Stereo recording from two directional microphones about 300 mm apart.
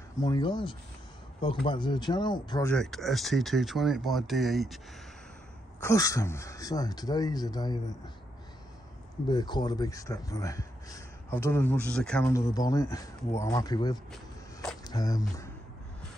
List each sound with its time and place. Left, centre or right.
0.2 s speech: centre
2.7 s speech: centre
5.8 s speech: centre
9.3 s speech: centre
14.6 s a sound: centre